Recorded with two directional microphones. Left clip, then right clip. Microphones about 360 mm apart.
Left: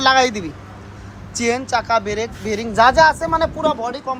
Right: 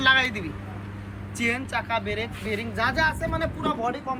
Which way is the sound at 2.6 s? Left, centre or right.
Centre.